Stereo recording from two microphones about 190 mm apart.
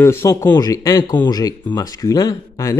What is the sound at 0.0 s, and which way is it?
A man's voice, 15° left (ahead or behind).